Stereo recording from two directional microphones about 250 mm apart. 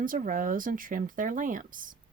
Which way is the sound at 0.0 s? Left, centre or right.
Right.